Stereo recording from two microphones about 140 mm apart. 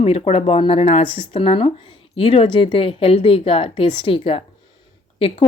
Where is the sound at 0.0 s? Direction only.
45° left (ahead or behind).